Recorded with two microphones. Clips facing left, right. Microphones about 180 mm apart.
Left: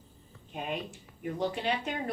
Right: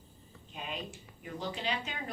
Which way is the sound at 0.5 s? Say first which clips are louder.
Left 5 dB; 50° left (ahead or behind).